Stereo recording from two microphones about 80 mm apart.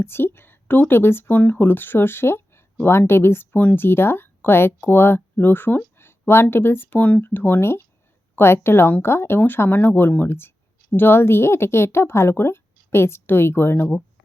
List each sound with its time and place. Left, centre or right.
0.0 s speech: left